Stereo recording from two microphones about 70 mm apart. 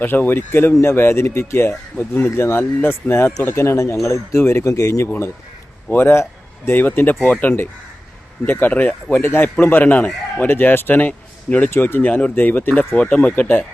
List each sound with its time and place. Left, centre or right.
0.0 s speech: left
5.9 s speech: left
8.9 s speech: centre
9.2 s speech: left
11.7 s speech: left